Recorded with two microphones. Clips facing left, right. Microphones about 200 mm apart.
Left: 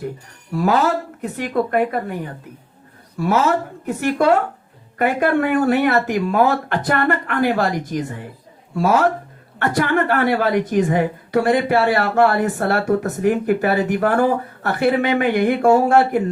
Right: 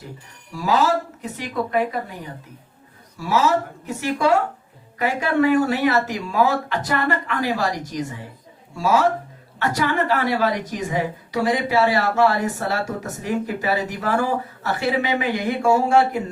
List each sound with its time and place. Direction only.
0.5 s a woman's voice: 55° left (ahead or behind)